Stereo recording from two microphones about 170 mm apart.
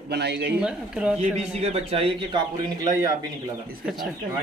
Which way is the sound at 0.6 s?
5° right (ahead or behind).